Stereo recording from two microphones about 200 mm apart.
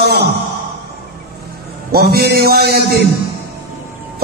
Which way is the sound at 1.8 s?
50° right (ahead or behind).